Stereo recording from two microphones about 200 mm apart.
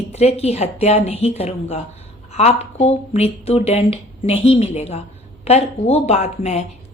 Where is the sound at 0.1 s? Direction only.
30° left (ahead or behind).